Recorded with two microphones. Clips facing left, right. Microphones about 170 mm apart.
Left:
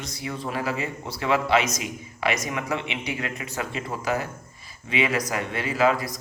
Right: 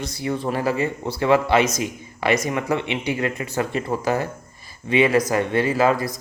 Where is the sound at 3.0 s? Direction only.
30° right (ahead or behind).